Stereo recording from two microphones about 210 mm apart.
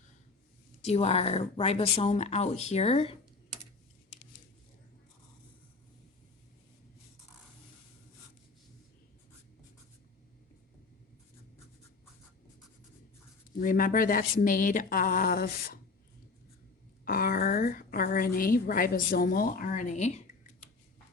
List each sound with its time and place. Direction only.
0.8 s speech: 30° left (ahead or behind)
13.6 s speech: 40° left (ahead or behind)
17.1 s a woman's voice: 45° left (ahead or behind)